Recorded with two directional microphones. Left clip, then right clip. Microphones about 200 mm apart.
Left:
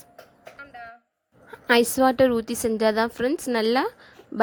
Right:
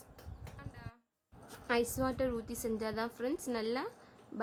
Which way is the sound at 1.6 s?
40° left (ahead or behind).